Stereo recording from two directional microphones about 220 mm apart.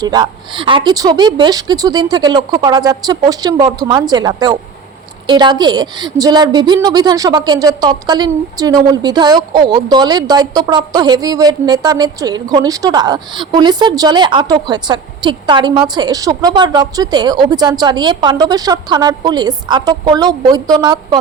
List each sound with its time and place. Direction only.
0.0 s a woman's voice: 20° right (ahead or behind)